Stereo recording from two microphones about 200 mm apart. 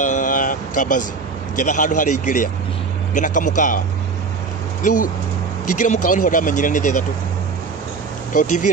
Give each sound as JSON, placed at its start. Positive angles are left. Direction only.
{"t": 0.0, "sound": "vehicle", "side_deg": 40}
{"t": 1.6, "sound": "speech", "side_deg": 40}
{"t": 5.8, "sound": "speech", "side_deg": 40}
{"t": 8.3, "sound": "speech", "side_deg": 40}